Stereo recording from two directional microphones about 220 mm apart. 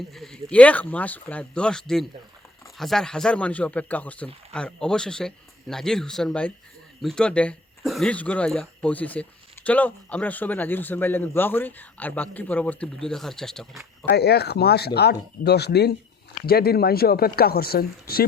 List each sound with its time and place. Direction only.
0.1 s a man's voice: centre (ahead or behind)
14.1 s speech: 45° left (ahead or behind)